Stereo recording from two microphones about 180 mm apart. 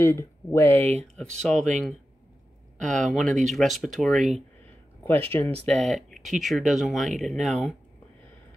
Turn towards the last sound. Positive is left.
turn(degrees=0)  # may be behind; listen again after turning